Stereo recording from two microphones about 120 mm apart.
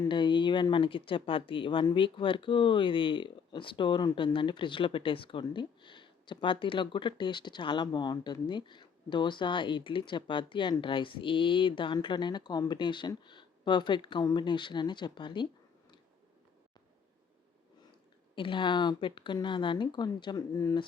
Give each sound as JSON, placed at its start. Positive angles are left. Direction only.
{"t": 0.1, "sound": "speech", "side_deg": 40}
{"t": 18.3, "sound": "speech", "side_deg": 45}